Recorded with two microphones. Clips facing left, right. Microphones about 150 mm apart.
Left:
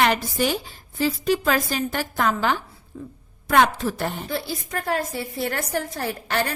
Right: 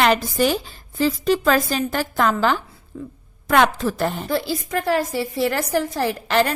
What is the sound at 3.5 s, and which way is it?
A woman's voice, 90° right.